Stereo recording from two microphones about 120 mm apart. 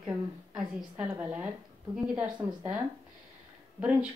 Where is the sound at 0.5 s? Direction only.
5° right (ahead or behind).